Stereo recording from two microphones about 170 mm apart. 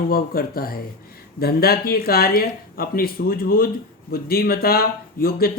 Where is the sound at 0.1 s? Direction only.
60° left (ahead or behind).